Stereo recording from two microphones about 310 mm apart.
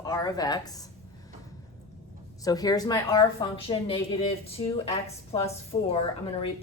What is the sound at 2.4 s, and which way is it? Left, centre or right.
Speech, centre.